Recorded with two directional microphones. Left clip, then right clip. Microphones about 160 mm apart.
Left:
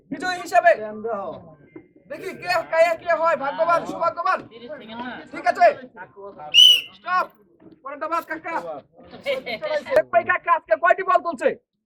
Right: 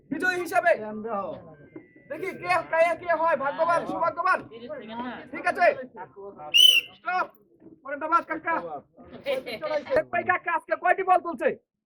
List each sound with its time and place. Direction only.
0.1 s a sound: 25° right (ahead or behind)
0.4 s a man's voice: 25° right (ahead or behind)
7.9 s a woman's voice: 20° right (ahead or behind)
9.2 s a woman's voice: 15° right (ahead or behind)